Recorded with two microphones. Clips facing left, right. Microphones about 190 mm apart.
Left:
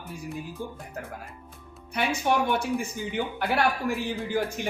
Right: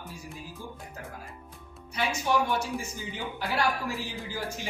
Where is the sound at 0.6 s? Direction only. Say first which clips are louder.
Left 6 dB; 60° left (ahead or behind).